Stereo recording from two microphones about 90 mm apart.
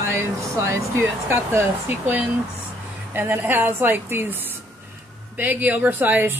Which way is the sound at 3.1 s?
25° right (ahead or behind).